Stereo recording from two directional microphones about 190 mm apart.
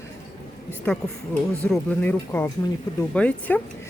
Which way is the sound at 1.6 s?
5° left (ahead or behind).